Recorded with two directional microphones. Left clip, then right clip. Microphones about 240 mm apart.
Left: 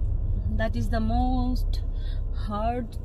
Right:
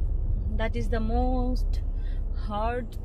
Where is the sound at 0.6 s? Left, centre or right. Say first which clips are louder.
Left 1 dB; centre.